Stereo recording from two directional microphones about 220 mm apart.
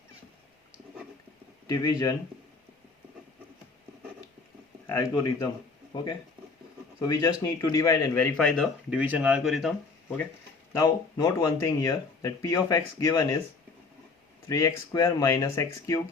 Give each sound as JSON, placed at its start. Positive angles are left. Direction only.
{"t": 1.6, "sound": "speech", "side_deg": 15}
{"t": 4.9, "sound": "speech", "side_deg": 15}
{"t": 7.0, "sound": "speech", "side_deg": 15}
{"t": 10.7, "sound": "speech", "side_deg": 15}
{"t": 14.4, "sound": "speech", "side_deg": 15}